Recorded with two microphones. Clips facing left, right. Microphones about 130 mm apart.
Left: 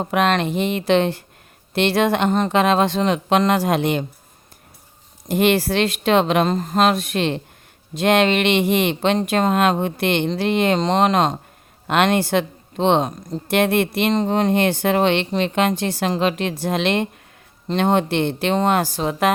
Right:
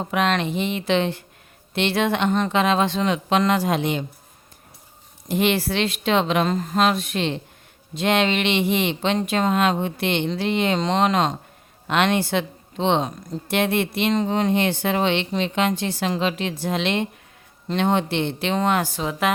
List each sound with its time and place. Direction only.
0.0 s speech: 50° left (ahead or behind)
5.3 s speech: 50° left (ahead or behind)
6.5 s speech: 35° left (ahead or behind); by 10.8 s 55° left (ahead or behind)
10.8 s speech: 45° left (ahead or behind)
14.1 s speech: 35° left (ahead or behind)
14.3 s speech: 50° left (ahead or behind)